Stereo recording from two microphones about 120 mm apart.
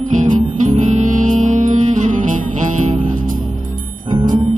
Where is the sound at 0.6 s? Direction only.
85° right.